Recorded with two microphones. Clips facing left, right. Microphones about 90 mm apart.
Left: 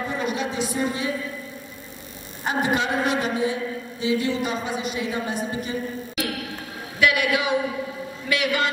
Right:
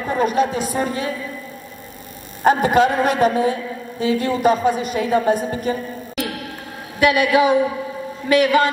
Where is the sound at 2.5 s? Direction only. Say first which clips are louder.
Right 9 dB; 45° right (ahead or behind).